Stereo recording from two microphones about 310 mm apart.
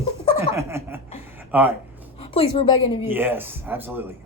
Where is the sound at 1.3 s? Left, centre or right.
Centre.